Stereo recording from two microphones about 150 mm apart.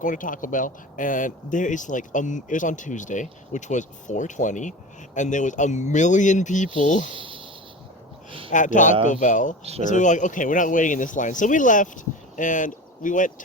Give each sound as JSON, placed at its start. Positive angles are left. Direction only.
{"t": 0.0, "sound": "speech", "side_deg": 60}
{"t": 7.1, "sound": "speech", "side_deg": -35}
{"t": 8.4, "sound": "speech", "side_deg": 55}